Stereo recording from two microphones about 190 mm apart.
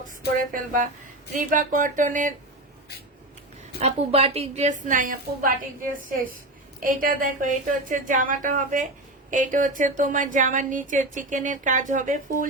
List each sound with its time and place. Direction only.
0.5 s speech: 45° right (ahead or behind)
3.8 s speech: 35° right (ahead or behind)